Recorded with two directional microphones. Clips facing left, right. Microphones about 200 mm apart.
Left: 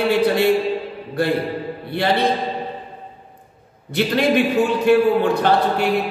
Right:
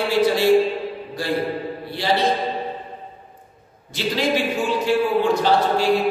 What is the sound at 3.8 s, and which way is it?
Speech, 60° left (ahead or behind).